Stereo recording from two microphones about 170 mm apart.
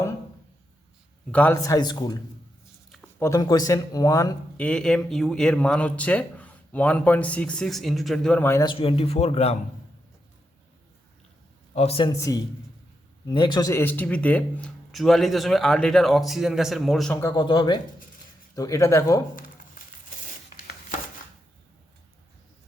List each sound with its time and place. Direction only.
1.3 s speech: 10° left (ahead or behind)
1.5 s a man's voice: 20° left (ahead or behind)
2.9 s a sound: 5° left (ahead or behind)
3.2 s a man's voice: 20° left (ahead or behind)
4.6 s speech: 5° left (ahead or behind)
8.6 s speech: 30° left (ahead or behind)
11.7 s a man's voice: 35° left (ahead or behind)
12.1 s a man's voice: 20° left (ahead or behind); by 17.2 s centre (ahead or behind)
17.2 s a man's voice: 20° left (ahead or behind)